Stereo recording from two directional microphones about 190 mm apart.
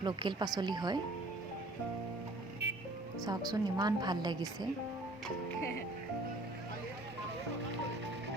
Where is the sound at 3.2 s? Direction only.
20° right (ahead or behind).